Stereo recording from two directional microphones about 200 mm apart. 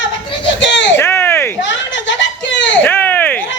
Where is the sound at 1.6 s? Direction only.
65° left (ahead or behind).